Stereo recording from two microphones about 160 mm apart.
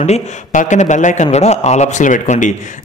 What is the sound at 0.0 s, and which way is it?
A man's voice, 45° left (ahead or behind).